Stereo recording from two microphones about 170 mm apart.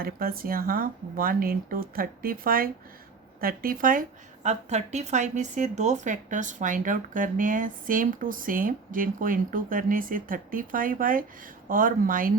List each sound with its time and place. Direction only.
0.0 s speech: 60° right (ahead or behind)
4.4 s speech: 40° right (ahead or behind)